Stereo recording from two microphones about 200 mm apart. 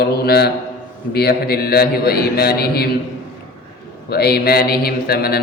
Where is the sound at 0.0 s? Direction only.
50° left (ahead or behind).